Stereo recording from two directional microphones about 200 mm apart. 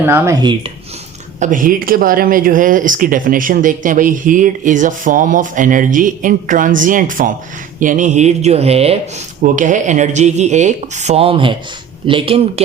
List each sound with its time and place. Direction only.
0.0 s speech: 10° right (ahead or behind)
1.4 s speech: 40° right (ahead or behind)